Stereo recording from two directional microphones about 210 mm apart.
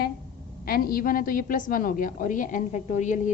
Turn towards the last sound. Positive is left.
turn(degrees=35)  # may be behind; listen again after turning